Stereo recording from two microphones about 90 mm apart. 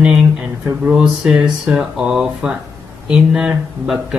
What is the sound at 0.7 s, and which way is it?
Speech, 10° right (ahead or behind).